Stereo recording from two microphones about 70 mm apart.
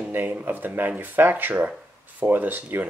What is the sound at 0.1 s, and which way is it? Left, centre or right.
Speech, right.